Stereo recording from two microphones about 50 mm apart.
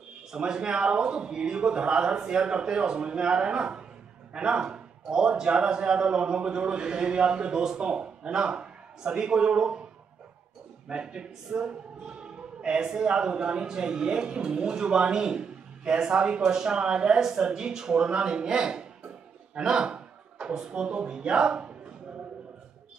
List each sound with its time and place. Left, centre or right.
0.3 s a man's voice: centre
10.9 s speech: right